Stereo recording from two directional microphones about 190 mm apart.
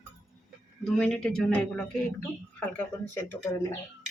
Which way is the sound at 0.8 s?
Centre (ahead or behind).